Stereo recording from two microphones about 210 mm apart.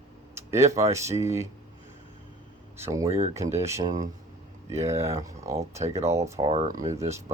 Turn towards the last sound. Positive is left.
turn(degrees=-15)  # may be behind; listen again after turning